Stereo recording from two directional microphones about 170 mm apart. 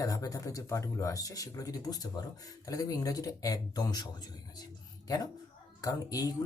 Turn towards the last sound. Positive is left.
turn(degrees=20)  # may be behind; listen again after turning